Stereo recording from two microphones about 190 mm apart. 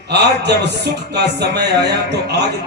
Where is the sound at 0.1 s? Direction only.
60° right (ahead or behind).